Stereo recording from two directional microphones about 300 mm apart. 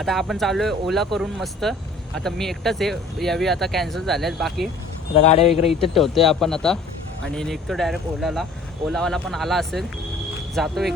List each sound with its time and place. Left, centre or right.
0.0 s speech: centre
5.1 s speech: left
5.9 s speech: centre